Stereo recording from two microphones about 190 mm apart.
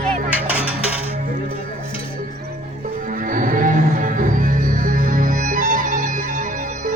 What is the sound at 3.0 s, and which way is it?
Music, 45° right (ahead or behind).